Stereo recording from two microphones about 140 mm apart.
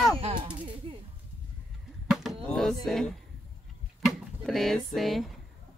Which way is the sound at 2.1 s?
5° right (ahead or behind).